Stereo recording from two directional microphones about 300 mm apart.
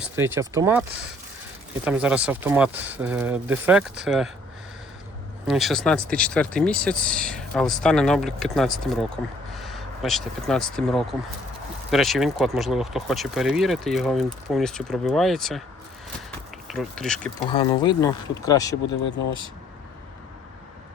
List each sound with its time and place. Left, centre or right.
0.0 s speech: centre
5.5 s speech: centre
16.6 s speech: centre
17.5 s speech: centre